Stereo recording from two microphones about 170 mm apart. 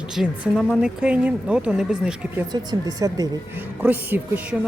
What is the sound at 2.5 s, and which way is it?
Speech, 20° right (ahead or behind).